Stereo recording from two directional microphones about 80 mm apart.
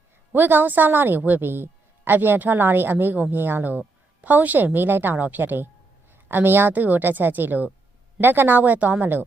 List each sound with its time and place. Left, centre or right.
0.3 s a woman's voice: right